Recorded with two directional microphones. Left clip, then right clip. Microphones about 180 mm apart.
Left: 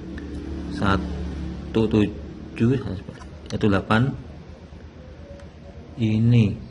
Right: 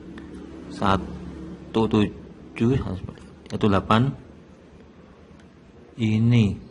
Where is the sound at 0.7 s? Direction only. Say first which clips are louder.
Right 1 dB; 20° right (ahead or behind).